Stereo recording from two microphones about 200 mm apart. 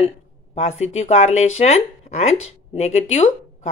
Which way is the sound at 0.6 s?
35° left (ahead or behind).